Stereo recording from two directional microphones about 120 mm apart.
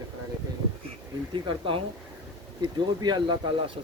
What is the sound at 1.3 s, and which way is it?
Speech, 45° right (ahead or behind).